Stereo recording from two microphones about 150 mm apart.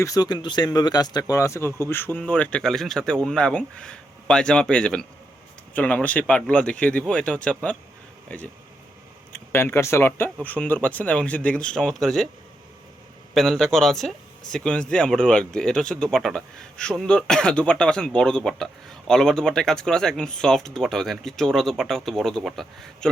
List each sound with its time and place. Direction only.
0.0 s a man's voice: 25° left (ahead or behind); by 7.8 s 10° left (ahead or behind)
9.3 s speech: 15° left (ahead or behind)
13.3 s a man's voice: centre (ahead or behind)